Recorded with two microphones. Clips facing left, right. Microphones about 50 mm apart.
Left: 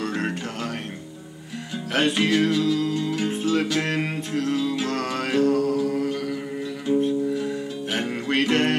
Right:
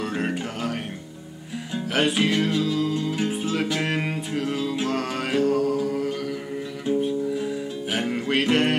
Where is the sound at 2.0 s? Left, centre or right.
Centre.